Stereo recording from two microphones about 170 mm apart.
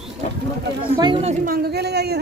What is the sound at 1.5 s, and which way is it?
Speech, 70° right (ahead or behind).